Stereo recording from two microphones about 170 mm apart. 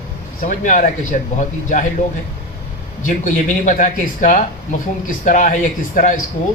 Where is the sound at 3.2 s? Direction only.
45° left (ahead or behind).